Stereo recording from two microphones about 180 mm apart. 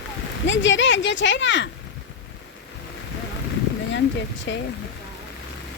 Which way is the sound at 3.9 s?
85° left.